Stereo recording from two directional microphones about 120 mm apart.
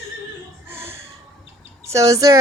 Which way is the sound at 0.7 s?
20° right (ahead or behind).